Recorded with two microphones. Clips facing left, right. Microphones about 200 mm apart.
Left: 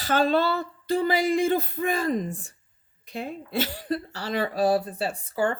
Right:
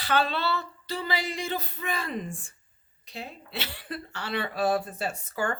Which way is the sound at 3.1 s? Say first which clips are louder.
Left 7 dB; 50° left (ahead or behind).